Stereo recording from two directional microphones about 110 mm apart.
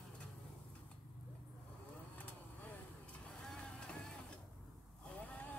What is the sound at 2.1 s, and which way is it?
Vehicle, 15° left (ahead or behind).